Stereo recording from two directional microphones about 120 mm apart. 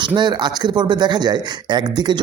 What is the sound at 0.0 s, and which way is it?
A man's voice, 40° right (ahead or behind).